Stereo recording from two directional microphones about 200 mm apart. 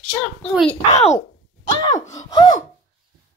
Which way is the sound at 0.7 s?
35° left (ahead or behind).